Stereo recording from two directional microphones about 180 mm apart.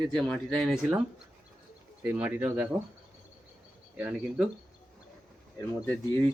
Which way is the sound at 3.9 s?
5° right (ahead or behind).